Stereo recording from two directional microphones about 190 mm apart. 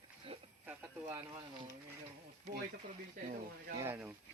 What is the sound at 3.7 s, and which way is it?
Speech, 10° right (ahead or behind).